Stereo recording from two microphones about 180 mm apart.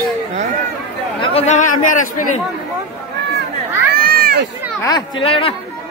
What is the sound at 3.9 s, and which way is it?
Children playing, 55° right (ahead or behind).